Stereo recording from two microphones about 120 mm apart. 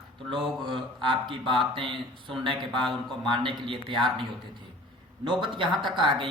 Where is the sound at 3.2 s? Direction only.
40° right (ahead or behind).